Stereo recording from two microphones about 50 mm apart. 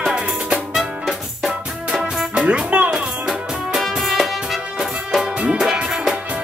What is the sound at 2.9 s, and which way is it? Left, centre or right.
Music, centre.